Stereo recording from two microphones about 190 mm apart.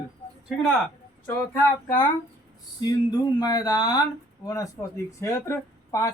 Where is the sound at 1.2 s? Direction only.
10° left (ahead or behind).